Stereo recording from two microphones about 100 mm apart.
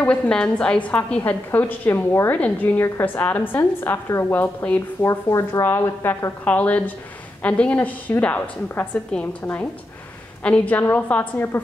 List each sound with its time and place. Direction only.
0.0 s a woman's voice: 10° left (ahead or behind)
5.0 s a woman's voice: 25° left (ahead or behind)
6.4 s a woman's voice: 15° left (ahead or behind)